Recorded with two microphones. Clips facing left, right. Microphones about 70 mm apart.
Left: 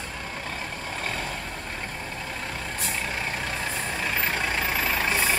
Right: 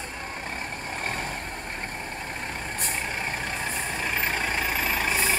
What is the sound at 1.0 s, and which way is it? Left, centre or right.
Vehicle, right.